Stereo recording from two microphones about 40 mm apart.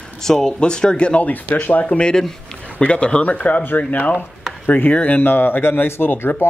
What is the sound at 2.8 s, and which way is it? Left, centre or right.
Speech, left.